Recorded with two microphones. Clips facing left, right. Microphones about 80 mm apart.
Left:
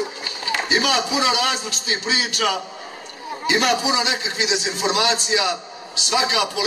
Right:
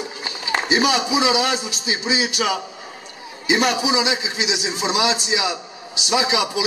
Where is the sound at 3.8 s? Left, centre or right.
Centre.